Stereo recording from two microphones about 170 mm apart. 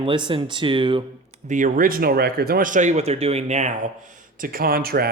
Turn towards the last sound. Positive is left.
turn(degrees=-65)  # may be behind; listen again after turning